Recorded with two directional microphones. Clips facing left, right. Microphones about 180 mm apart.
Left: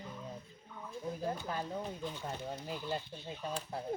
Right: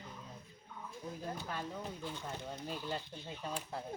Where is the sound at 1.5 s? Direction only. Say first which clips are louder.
Left 4 dB; 35° left (ahead or behind).